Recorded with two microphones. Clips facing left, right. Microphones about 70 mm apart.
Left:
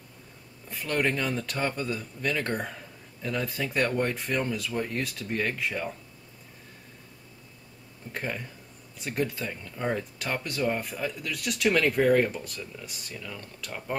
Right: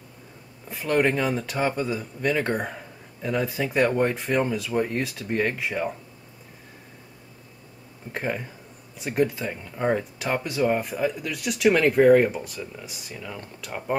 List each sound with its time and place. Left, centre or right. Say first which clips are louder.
0.7 s speech: right 5 dB; centre
8.1 s speech: right 5 dB; centre
13.2 s speech: right 3 dB; centre